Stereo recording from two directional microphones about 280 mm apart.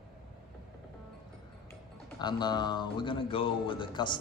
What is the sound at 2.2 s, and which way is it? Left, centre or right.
A man's voice, centre.